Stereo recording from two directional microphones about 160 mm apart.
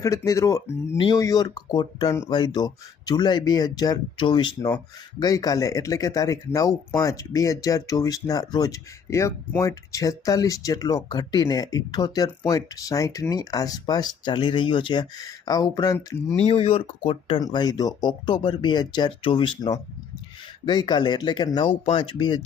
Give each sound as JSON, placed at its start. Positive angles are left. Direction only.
{"t": 0.0, "sound": "speech", "side_deg": 20}
{"t": 16.3, "sound": "speech", "side_deg": 40}